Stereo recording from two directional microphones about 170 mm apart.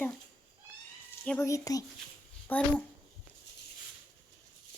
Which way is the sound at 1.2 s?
5° left (ahead or behind).